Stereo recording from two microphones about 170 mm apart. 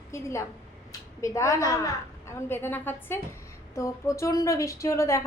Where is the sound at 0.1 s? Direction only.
15° left (ahead or behind).